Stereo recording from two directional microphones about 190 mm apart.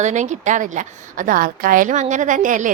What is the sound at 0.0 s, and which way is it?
A woman's voice, 40° right (ahead or behind).